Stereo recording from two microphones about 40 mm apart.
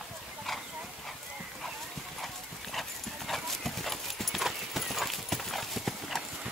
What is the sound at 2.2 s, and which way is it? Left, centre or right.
Clip-clop, centre.